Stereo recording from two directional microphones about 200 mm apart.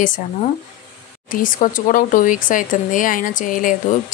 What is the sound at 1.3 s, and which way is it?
Speech, 40° left (ahead or behind).